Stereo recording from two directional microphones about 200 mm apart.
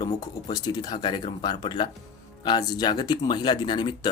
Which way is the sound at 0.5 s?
20° left (ahead or behind).